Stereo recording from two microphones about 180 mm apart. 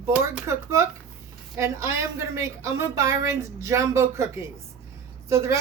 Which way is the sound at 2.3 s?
15° right (ahead or behind).